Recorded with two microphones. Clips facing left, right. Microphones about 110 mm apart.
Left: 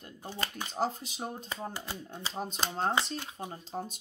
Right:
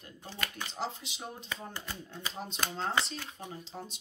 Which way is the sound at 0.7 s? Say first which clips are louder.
Left 7 dB; 45° left (ahead or behind).